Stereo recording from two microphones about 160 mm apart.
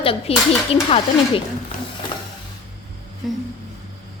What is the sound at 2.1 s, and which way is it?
Printer, 30° left (ahead or behind).